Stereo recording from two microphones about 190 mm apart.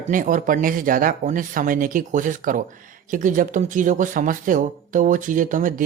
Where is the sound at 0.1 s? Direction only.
45° right (ahead or behind).